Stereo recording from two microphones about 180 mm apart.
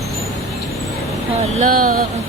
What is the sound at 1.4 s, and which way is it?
Speech, 45° right (ahead or behind).